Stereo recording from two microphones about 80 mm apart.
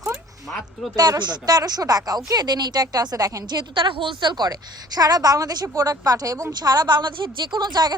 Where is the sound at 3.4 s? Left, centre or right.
Right.